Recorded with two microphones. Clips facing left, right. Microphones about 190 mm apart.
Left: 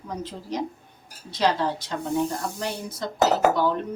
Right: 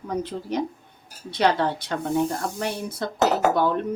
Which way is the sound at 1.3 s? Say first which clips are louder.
Right 2 dB; 60° right (ahead or behind).